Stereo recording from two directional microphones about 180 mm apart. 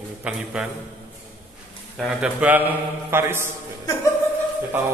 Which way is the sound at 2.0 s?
5° right (ahead or behind).